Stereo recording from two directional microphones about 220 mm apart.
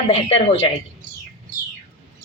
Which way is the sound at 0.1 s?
30° left (ahead or behind).